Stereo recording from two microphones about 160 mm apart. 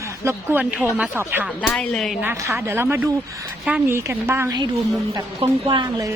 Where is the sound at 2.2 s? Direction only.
15° right (ahead or behind).